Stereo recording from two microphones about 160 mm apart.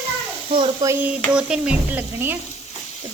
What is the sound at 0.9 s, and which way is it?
Speech, 10° right (ahead or behind).